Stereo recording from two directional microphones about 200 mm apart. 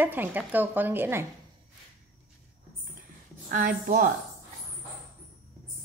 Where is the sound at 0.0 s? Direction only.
10° right (ahead or behind).